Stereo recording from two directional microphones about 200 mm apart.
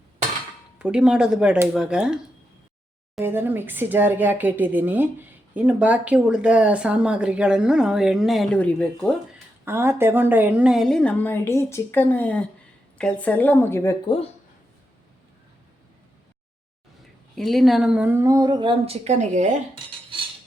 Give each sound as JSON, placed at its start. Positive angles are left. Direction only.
{"t": 0.8, "sound": "speech", "side_deg": -5}
{"t": 3.2, "sound": "speech", "side_deg": -10}
{"t": 9.6, "sound": "a woman's voice", "side_deg": -10}
{"t": 17.3, "sound": "speech", "side_deg": 0}